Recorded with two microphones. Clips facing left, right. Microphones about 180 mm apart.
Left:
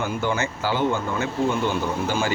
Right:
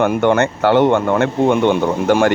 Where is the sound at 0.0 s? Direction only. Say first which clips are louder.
Right 11 dB; 65° right (ahead or behind).